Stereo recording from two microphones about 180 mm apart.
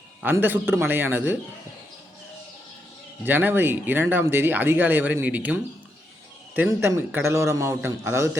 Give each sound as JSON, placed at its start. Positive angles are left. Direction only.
{"t": 0.2, "sound": "speech", "side_deg": -10}
{"t": 3.2, "sound": "speech", "side_deg": -10}
{"t": 6.6, "sound": "speech", "side_deg": -15}